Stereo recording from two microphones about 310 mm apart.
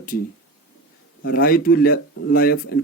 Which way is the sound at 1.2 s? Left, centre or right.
Left.